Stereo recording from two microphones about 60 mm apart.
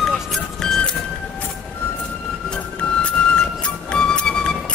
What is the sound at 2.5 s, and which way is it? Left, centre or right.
Music, centre.